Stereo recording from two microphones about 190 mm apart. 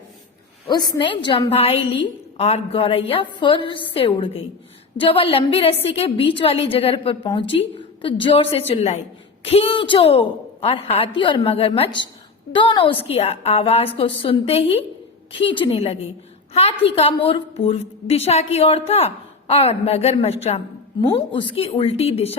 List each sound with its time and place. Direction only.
0.9 s a woman's voice: 25° left (ahead or behind)